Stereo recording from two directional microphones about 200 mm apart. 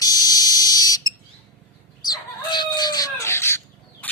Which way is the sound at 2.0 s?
20° left (ahead or behind).